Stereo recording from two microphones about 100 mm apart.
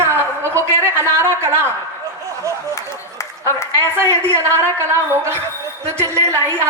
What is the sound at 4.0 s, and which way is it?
Speech, 25° right (ahead or behind).